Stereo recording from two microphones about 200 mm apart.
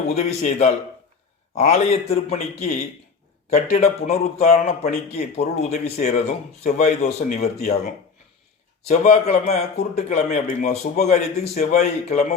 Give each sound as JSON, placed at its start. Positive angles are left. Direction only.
{"t": 0.1, "sound": "a man's voice", "side_deg": 35}
{"t": 1.7, "sound": "a man's voice", "side_deg": 30}
{"t": 8.9, "sound": "a man's voice", "side_deg": 35}